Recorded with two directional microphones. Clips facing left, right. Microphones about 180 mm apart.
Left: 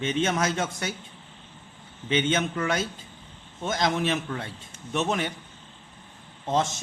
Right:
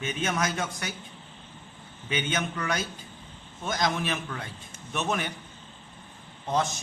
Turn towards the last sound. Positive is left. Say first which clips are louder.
# left 2 dB
turn(degrees=20)  # may be behind; listen again after turning